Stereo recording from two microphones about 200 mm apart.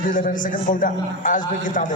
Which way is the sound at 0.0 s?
40° left (ahead or behind).